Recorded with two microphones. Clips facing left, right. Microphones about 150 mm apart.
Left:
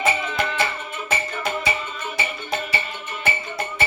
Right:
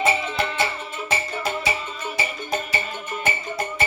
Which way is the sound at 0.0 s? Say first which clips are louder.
Even; 30° right (ahead or behind).